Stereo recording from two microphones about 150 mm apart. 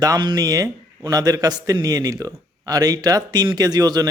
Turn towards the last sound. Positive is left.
turn(degrees=-25)  # may be behind; listen again after turning